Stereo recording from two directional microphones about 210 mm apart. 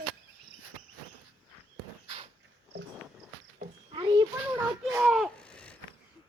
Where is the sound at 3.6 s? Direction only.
25° right (ahead or behind).